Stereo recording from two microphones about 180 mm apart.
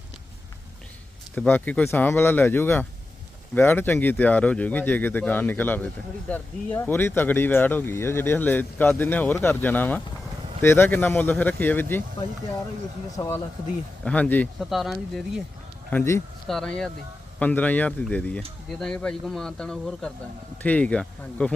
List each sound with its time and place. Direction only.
1.4 s speech: 10° left (ahead or behind)
13.1 s speech: 15° left (ahead or behind); by 15.4 s centre (ahead or behind)
15.9 s speech: 10° left (ahead or behind)